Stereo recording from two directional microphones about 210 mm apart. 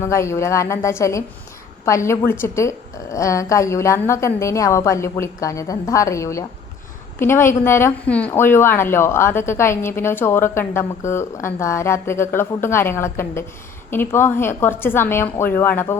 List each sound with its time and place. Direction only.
0.0 s a woman's voice: 15° left (ahead or behind)